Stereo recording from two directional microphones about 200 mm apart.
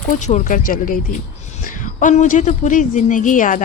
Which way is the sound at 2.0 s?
40° left (ahead or behind).